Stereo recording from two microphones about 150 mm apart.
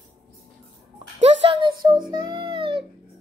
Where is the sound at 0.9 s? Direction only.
35° right (ahead or behind).